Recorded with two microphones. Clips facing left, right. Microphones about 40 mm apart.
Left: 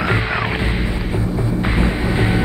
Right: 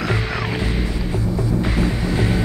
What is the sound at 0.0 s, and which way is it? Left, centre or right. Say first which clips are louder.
Music: left 4 dB; left.